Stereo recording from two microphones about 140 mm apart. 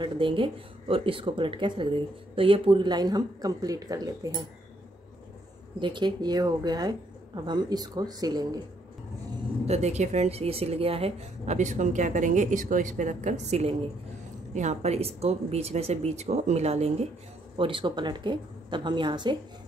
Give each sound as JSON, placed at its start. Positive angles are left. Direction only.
{"t": 0.0, "sound": "a woman's voice", "side_deg": -35}
{"t": 5.8, "sound": "a woman's voice", "side_deg": -35}
{"t": 9.7, "sound": "speech", "side_deg": -50}
{"t": 17.6, "sound": "a woman's voice", "side_deg": -35}